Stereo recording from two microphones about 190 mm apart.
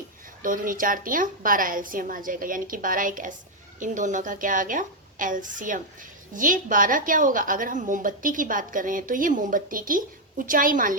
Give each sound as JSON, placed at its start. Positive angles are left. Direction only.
{"t": 0.4, "sound": "a woman's voice", "side_deg": -45}